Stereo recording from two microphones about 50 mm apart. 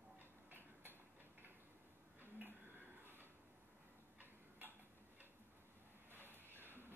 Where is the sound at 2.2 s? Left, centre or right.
Right.